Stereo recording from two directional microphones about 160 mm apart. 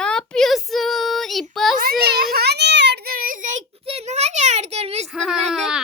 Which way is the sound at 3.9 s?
40° right (ahead or behind).